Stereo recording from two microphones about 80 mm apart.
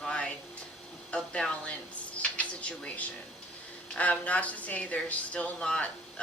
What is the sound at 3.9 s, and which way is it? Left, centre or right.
Speech, centre.